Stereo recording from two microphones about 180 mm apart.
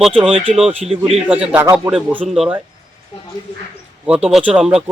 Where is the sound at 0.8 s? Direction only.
30° right (ahead or behind).